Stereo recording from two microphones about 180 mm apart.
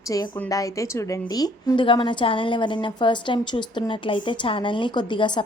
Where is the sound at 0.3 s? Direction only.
20° left (ahead or behind).